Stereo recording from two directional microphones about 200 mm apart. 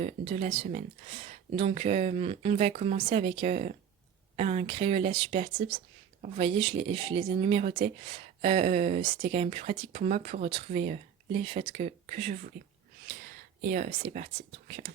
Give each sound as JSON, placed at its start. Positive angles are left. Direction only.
{"t": 0.0, "sound": "speech", "side_deg": -35}
{"t": 13.6, "sound": "speech", "side_deg": -40}